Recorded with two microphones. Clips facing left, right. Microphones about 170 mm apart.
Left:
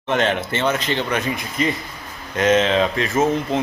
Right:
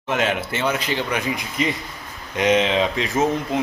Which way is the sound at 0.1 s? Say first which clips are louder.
Left 2 dB; 10° right (ahead or behind).